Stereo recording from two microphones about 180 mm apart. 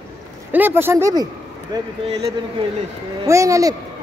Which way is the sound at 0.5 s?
10° right (ahead or behind).